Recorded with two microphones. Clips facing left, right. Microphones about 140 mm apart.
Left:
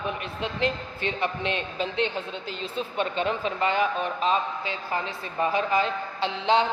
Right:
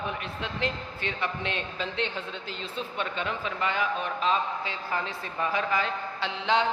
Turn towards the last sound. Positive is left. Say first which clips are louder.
# left 3 dB
turn(degrees=25)  # may be behind; listen again after turning